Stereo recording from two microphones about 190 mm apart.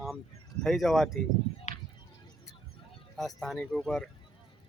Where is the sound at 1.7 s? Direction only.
40° left (ahead or behind).